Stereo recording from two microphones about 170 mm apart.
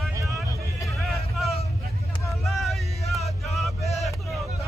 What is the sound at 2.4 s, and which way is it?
Vehicle, centre (ahead or behind).